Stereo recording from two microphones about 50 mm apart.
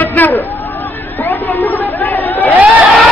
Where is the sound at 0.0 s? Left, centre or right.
Left.